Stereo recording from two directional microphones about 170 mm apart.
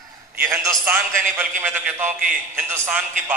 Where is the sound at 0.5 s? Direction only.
15° right (ahead or behind).